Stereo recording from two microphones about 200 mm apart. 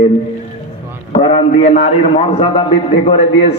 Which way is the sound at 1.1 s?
30° left (ahead or behind).